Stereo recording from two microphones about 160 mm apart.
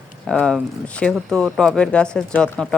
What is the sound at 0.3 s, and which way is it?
Speech, 5° left (ahead or behind).